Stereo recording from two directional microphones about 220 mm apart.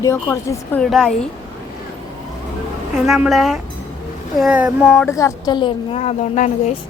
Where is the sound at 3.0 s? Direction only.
Centre (ahead or behind).